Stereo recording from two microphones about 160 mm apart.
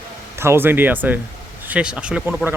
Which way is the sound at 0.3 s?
15° right (ahead or behind).